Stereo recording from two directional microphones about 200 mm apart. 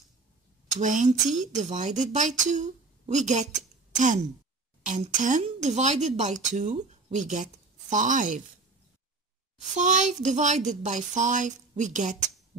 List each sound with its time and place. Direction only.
0.7 s speech: 40° right (ahead or behind)
9.8 s speech: 35° right (ahead or behind)